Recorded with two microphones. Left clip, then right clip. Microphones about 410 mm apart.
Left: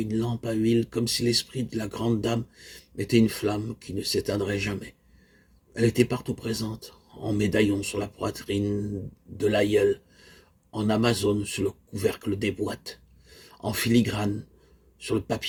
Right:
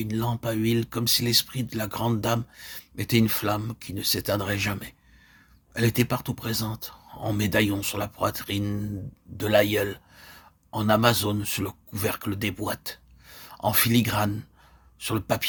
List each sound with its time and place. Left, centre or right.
0.0 s speech: right